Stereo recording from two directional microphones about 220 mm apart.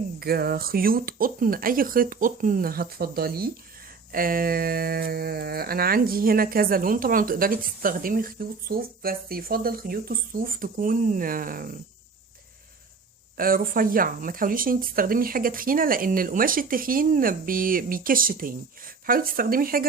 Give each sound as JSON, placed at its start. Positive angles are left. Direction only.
{"t": 0.2, "sound": "speech", "side_deg": -45}
{"t": 13.3, "sound": "speech", "side_deg": -40}